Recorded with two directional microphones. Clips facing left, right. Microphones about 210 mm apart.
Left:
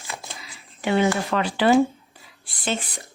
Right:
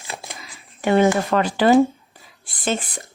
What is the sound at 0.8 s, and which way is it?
Speech, 50° right (ahead or behind).